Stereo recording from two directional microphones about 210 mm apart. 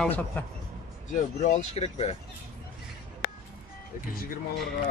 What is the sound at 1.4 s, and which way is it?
Speech, 35° left (ahead or behind).